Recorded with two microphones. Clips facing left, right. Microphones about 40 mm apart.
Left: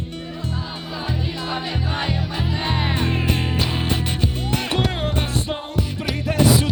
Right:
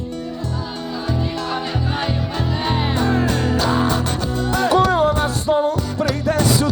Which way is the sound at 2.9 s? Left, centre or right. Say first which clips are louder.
Right 4 dB; left.